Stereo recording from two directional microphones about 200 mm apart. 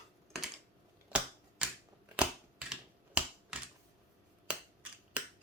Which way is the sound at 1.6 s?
5° right (ahead or behind).